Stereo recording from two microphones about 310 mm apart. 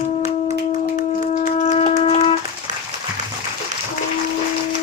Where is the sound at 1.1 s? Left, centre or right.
Left.